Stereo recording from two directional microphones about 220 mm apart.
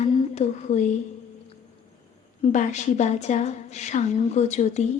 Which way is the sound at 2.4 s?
30° left (ahead or behind).